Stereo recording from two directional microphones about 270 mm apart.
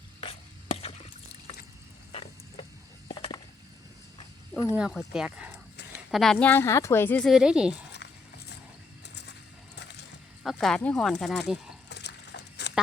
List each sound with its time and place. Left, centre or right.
0.2 s chopping: left
3.1 s chop: centre
4.7 s a woman's voice: centre
8.0 s a sound: left
9.7 s crushing: left
10.4 s a woman's voice: centre
11.9 s a sound: left